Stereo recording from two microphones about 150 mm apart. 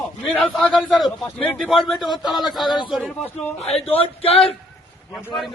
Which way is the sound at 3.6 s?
45° left (ahead or behind).